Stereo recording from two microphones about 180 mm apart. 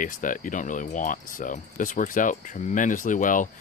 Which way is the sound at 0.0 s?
45° left (ahead or behind).